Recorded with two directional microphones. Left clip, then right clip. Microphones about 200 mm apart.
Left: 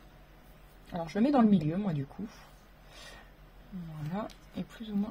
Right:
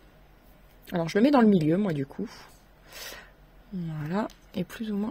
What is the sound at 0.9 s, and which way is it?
Speech, 50° right (ahead or behind).